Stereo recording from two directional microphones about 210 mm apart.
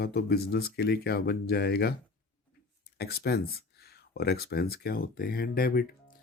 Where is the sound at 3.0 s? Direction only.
50° left (ahead or behind).